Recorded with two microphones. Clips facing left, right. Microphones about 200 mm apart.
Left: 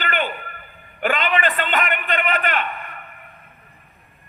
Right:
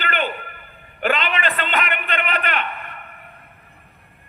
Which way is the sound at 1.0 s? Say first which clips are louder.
Left 1 dB; 45° left (ahead or behind).